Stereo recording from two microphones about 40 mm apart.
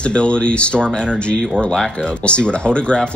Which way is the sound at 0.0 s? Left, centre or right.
Left.